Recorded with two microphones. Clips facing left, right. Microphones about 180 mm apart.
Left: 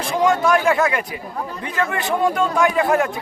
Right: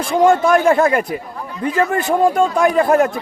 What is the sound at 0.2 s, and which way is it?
A man's voice, 45° right (ahead or behind).